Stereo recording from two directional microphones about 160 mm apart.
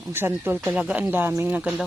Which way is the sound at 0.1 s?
15° right (ahead or behind).